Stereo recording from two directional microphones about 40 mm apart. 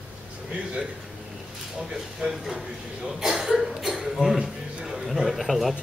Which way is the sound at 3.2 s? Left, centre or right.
Centre.